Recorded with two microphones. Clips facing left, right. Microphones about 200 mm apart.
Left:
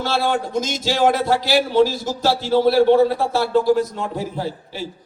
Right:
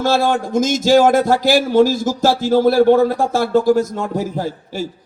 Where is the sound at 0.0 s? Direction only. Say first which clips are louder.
Right 4 dB; 45° right (ahead or behind).